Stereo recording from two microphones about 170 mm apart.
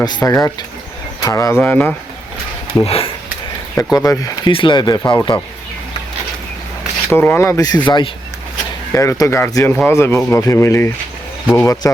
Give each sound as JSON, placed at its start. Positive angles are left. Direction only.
{"t": 0.2, "sound": "speech", "side_deg": 15}
{"t": 1.5, "sound": "speech", "side_deg": 10}
{"t": 2.8, "sound": "speech", "side_deg": 35}
{"t": 3.9, "sound": "speech", "side_deg": 20}
{"t": 7.1, "sound": "speech", "side_deg": 15}